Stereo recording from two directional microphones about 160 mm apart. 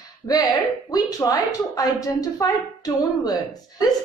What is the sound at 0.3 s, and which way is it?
A woman's voice, 20° left (ahead or behind).